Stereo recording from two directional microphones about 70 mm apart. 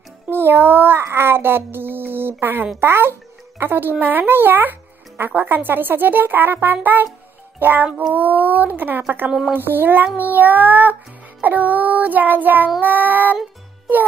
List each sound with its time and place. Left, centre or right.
0.3 s music: right
1.0 s a child's voice: right